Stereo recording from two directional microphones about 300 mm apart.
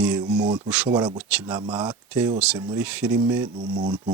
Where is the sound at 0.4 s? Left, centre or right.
Centre.